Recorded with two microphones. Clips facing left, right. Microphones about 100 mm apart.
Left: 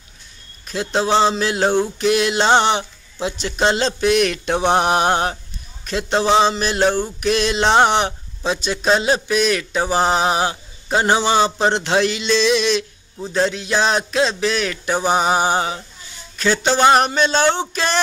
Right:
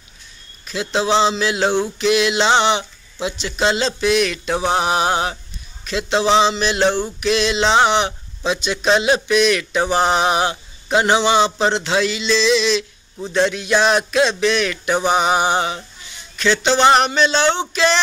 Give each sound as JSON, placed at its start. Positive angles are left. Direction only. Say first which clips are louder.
{"t": 0.7, "sound": "speech", "louder": "even", "side_deg": 45}
{"t": 4.6, "sound": "mantra", "louder": "left 2 dB", "side_deg": 55}
{"t": 5.9, "sound": "speech", "louder": "even", "side_deg": 45}
{"t": 13.3, "sound": "speech", "louder": "right 2 dB", "side_deg": 35}